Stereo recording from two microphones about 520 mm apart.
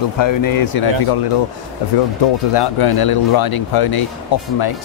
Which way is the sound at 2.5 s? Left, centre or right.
Left.